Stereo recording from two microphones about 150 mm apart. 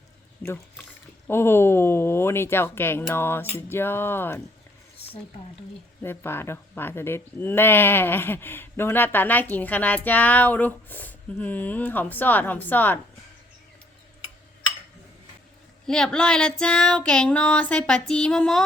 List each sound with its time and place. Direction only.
1.3 s speech: 15° left (ahead or behind)
6.0 s speech: 15° left (ahead or behind)
15.9 s female singing: 5° left (ahead or behind)